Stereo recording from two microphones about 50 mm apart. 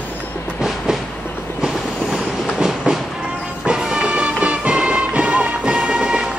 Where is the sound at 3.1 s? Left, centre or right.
Centre.